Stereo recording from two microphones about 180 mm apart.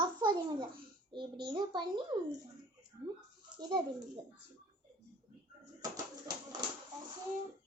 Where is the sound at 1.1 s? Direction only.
25° right (ahead or behind).